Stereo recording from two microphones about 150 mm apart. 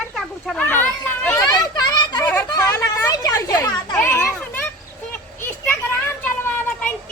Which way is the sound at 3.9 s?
15° left (ahead or behind).